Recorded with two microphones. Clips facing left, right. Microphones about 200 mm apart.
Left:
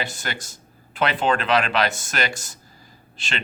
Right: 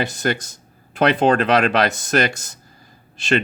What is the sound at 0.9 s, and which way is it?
Speech, 40° right (ahead or behind).